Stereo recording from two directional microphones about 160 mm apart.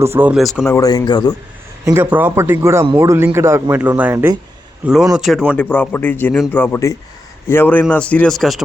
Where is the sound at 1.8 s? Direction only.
15° right (ahead or behind).